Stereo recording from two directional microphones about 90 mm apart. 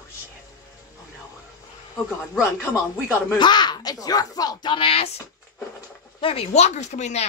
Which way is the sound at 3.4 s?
55° left (ahead or behind).